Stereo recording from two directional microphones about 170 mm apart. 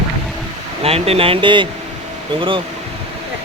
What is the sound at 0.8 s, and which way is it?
Speech, 35° right (ahead or behind).